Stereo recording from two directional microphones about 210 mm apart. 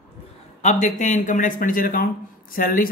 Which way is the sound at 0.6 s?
35° left (ahead or behind).